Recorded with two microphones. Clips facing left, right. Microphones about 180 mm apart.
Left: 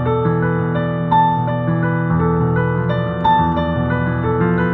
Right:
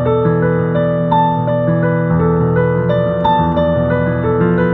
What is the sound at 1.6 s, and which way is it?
Music, 50° right (ahead or behind).